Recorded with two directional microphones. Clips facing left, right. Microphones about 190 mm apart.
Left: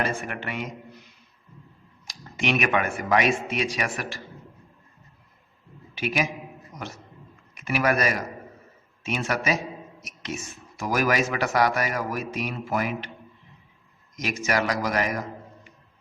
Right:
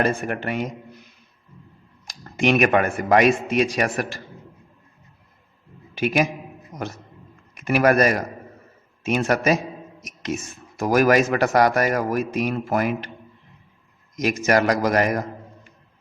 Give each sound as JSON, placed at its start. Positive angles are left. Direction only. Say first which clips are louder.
{"t": 0.0, "sound": "speech", "louder": "right 6 dB", "side_deg": -45}
{"t": 2.0, "sound": "speech", "louder": "right 7 dB", "side_deg": -45}
{"t": 5.9, "sound": "a man's voice", "louder": "right 6 dB", "side_deg": -45}
{"t": 7.5, "sound": "speech", "louder": "right 6 dB", "side_deg": -45}
{"t": 14.2, "sound": "speech", "louder": "right 7 dB", "side_deg": -45}